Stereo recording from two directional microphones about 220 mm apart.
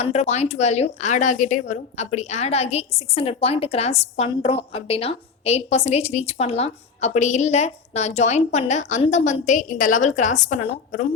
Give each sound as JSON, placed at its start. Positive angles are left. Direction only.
{"t": 0.0, "sound": "a woman's voice", "side_deg": 30}